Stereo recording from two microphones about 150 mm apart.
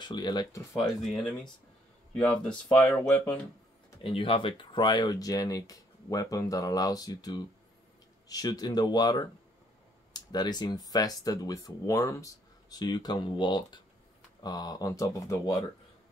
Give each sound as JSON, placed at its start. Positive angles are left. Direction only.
{"t": 0.0, "sound": "speech", "side_deg": 30}
{"t": 2.1, "sound": "speech", "side_deg": 5}
{"t": 4.0, "sound": "speech", "side_deg": 35}